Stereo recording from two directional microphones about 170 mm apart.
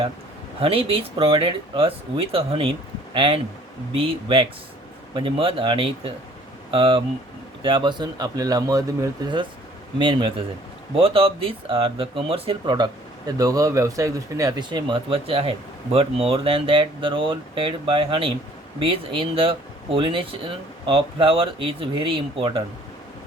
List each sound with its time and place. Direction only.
0.6 s speech: 35° right (ahead or behind)